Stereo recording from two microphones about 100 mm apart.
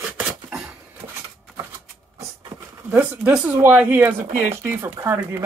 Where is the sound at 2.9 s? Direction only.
15° right (ahead or behind).